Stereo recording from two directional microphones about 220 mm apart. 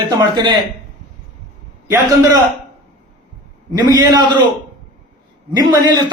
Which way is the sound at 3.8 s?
15° right (ahead or behind).